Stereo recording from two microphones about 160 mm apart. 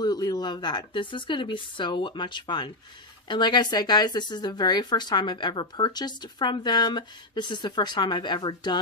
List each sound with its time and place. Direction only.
0.0 s speech: 25° left (ahead or behind)